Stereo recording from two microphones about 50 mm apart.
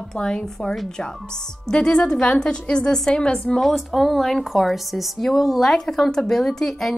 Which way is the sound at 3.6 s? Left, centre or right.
Centre.